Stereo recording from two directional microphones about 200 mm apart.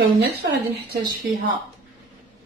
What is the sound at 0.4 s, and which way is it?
Speech, 55° right (ahead or behind).